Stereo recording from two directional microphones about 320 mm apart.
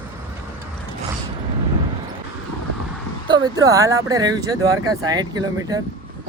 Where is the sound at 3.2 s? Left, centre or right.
Centre.